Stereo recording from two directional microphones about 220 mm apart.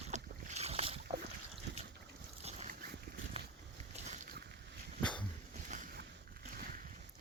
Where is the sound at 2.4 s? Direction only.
30° right (ahead or behind).